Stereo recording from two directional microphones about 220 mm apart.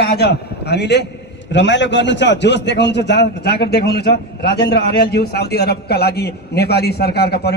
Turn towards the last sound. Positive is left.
turn(degrees=45)  # may be behind; listen again after turning